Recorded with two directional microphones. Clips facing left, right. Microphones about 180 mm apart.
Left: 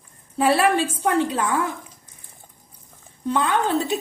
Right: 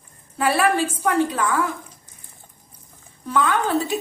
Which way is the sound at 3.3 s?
25° left (ahead or behind).